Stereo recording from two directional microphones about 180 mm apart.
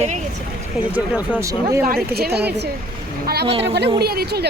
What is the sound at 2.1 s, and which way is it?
Speech, 60° right (ahead or behind).